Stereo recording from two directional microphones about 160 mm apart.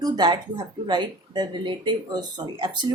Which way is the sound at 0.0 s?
25° right (ahead or behind).